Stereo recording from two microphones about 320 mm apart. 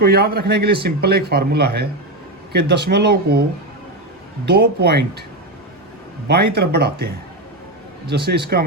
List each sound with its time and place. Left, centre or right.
0.0 s a man's voice: right
4.4 s speech: right
6.2 s a man's voice: right